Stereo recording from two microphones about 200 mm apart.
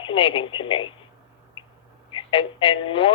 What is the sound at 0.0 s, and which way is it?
Speech, 25° left (ahead or behind).